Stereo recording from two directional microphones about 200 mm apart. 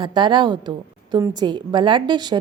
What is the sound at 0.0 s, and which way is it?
A woman's voice, 25° right (ahead or behind).